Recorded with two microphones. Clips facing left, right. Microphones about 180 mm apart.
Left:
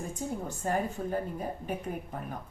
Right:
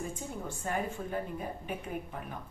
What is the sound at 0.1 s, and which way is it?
A woman's voice, 40° left (ahead or behind).